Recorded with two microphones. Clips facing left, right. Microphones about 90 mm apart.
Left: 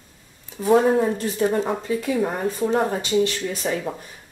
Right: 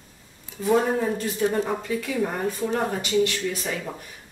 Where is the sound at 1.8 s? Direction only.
30° left (ahead or behind).